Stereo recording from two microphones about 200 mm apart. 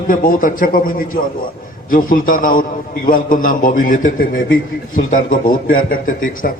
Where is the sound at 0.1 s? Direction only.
45° left (ahead or behind).